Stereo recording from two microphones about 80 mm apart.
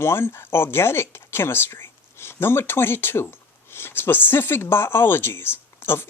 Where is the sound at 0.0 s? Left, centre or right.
Left.